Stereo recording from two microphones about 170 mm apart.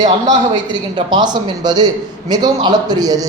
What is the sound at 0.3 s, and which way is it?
A man's voice, 25° right (ahead or behind).